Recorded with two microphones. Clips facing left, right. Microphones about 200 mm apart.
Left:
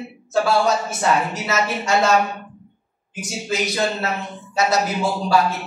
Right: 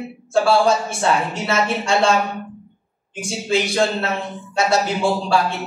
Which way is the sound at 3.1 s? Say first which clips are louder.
Right 5 dB; 30° right (ahead or behind).